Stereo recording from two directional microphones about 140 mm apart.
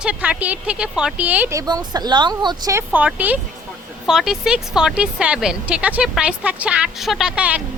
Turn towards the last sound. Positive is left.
turn(degrees=-10)  # may be behind; listen again after turning